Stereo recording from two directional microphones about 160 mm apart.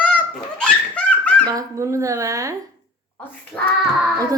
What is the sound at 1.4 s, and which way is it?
Speech, 20° right (ahead or behind).